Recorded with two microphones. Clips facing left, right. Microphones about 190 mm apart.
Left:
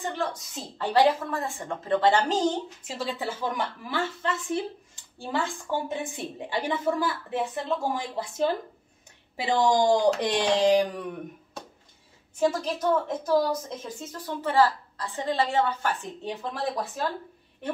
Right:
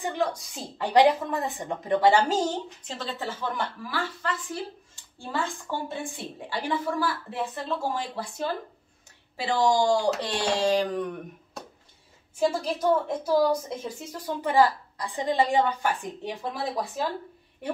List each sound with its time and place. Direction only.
0.0 s a woman's voice: 15° right (ahead or behind)
2.8 s a woman's voice: 10° left (ahead or behind)
12.4 s a woman's voice: 10° right (ahead or behind)
14.1 s a woman's voice: 15° right (ahead or behind)